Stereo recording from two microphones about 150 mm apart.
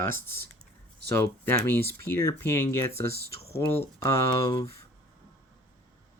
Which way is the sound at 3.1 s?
90° right.